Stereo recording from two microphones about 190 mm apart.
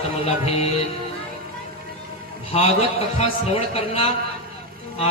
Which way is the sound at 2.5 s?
30° left (ahead or behind).